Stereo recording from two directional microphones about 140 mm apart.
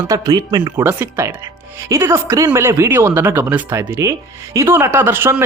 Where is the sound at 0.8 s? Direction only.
15° right (ahead or behind).